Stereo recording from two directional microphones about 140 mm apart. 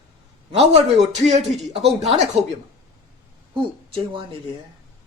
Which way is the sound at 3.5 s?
35° right (ahead or behind).